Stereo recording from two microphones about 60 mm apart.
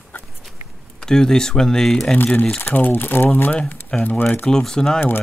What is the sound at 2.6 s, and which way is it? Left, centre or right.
Speech, left.